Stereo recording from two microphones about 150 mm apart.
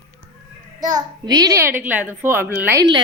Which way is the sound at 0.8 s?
25° right (ahead or behind).